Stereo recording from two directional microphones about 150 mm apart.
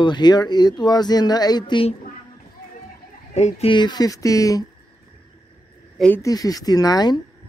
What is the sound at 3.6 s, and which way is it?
Speech, 30° left (ahead or behind).